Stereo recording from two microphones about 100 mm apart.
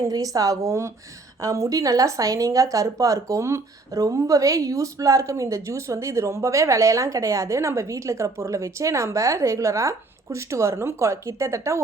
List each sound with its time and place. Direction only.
0.0 s a woman's voice: 35° right (ahead or behind)